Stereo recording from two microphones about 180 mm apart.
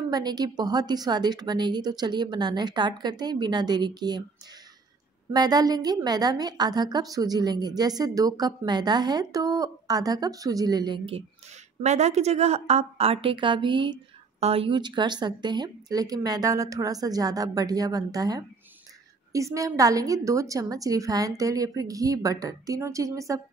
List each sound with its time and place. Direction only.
0.1 s a woman's voice: 20° right (ahead or behind)
5.3 s a woman's voice: 20° right (ahead or behind)